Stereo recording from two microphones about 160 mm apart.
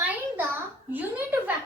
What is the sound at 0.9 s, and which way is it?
Speech, 10° right (ahead or behind).